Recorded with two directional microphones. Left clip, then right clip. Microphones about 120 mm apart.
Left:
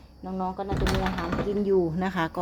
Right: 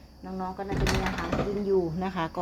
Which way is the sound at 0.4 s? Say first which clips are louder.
Left 3 dB; 30° left (ahead or behind).